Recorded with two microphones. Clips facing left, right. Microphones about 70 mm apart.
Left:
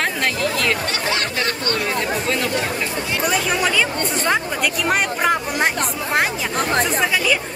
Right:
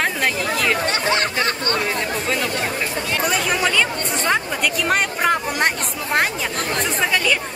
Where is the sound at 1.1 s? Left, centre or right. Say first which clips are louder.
Right 2 dB; right.